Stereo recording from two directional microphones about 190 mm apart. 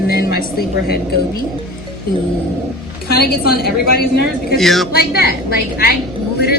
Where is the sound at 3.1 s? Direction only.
55° left (ahead or behind).